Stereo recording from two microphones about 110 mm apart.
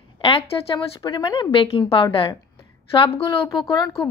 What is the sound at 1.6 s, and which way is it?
A woman's voice, 60° left (ahead or behind).